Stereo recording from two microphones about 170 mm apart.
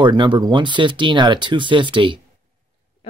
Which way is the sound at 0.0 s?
25° right (ahead or behind).